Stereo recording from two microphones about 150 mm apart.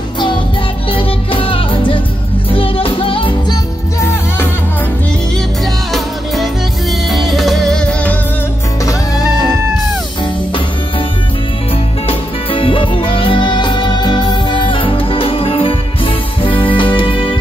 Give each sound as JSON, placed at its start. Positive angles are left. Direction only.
{"t": 0.9, "sound": "music", "side_deg": 35}
{"t": 5.9, "sound": "music", "side_deg": 0}
{"t": 8.8, "sound": "music", "side_deg": 25}
{"t": 12.1, "sound": "music", "side_deg": 35}